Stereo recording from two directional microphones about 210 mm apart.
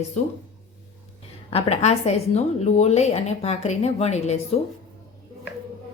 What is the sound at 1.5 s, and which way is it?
A woman's voice, 30° left (ahead or behind).